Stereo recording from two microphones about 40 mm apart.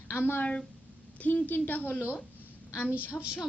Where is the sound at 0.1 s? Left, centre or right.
Left.